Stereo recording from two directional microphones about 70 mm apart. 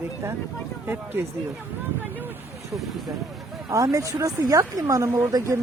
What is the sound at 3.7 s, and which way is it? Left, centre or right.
Speech, right.